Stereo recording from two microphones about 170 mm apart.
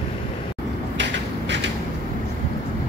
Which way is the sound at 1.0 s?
90° right.